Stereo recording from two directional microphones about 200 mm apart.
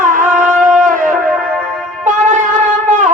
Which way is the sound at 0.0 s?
40° right (ahead or behind).